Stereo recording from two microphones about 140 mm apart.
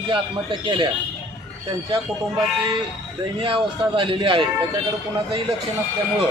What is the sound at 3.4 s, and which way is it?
A man's voice, 40° right (ahead or behind).